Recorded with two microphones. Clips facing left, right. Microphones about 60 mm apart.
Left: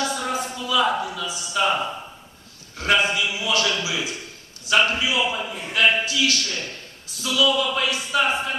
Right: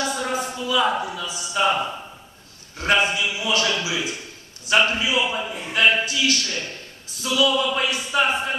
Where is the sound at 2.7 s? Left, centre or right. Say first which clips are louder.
Even; right.